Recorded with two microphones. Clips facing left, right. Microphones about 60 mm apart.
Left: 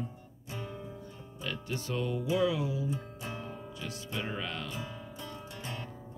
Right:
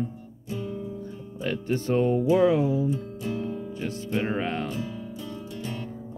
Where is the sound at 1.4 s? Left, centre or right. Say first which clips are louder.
Right 10 dB; right.